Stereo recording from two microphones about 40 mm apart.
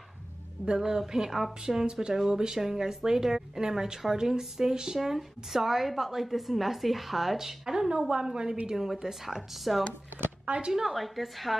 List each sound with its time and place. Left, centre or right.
0.7 s speech: centre
1.9 s a woman's voice: right
8.1 s a woman's voice: right
8.6 s speech: centre
10.4 s a woman's voice: right
10.7 s speech: centre
11.0 s speech: centre